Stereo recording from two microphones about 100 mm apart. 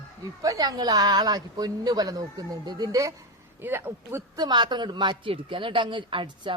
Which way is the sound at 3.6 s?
20° right (ahead or behind).